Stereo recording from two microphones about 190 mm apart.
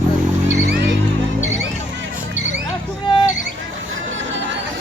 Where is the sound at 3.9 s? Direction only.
85° right.